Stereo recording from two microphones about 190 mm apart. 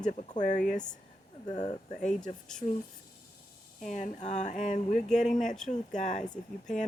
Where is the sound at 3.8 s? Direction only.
40° left (ahead or behind).